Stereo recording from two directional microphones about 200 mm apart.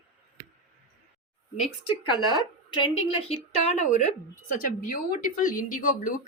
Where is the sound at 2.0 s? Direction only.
25° left (ahead or behind); by 6.1 s 40° left (ahead or behind).